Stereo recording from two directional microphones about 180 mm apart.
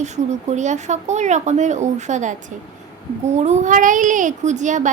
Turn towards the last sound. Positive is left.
turn(degrees=-45)  # may be behind; listen again after turning